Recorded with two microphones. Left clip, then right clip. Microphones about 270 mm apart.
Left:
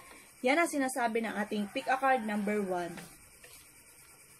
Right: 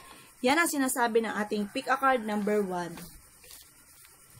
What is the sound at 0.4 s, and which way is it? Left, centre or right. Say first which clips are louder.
A woman's voice: right 3 dB; right.